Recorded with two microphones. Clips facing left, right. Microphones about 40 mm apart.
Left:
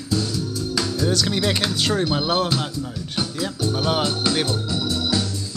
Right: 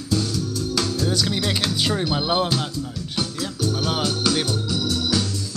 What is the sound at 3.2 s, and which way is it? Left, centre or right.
Organ, centre.